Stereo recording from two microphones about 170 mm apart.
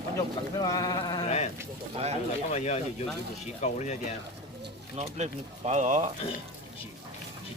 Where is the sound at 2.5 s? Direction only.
40° left (ahead or behind).